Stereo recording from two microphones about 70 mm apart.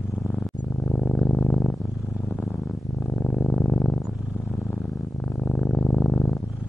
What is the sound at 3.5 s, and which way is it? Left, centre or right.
Purr, centre.